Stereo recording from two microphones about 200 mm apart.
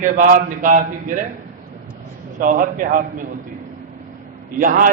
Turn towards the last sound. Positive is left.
turn(degrees=-45)  # may be behind; listen again after turning